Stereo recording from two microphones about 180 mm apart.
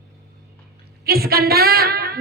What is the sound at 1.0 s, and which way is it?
A man's voice, 60° right (ahead or behind).